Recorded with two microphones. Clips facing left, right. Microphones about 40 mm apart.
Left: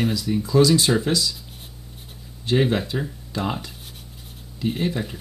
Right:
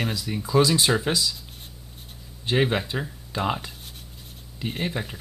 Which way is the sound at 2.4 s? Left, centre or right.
Centre.